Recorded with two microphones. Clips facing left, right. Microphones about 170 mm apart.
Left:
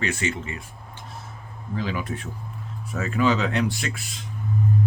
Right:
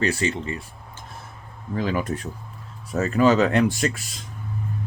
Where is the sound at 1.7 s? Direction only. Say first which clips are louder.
Right 4 dB; 45° right (ahead or behind).